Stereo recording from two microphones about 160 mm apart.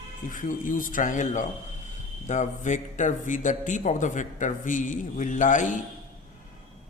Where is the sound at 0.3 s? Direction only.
55° left (ahead or behind).